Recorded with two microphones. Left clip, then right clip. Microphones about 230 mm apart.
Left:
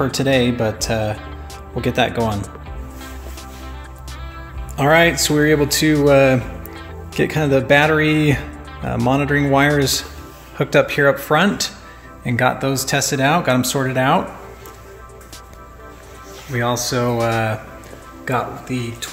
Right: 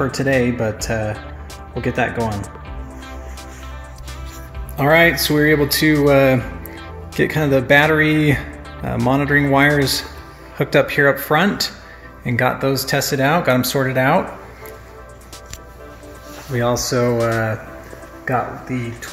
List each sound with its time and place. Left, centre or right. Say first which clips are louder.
0.0 s speech: left 1 dB; centre
2.1 s speech: left 2 dB; centre
4.7 s speech: even; centre
16.8 s speech: right 1 dB; centre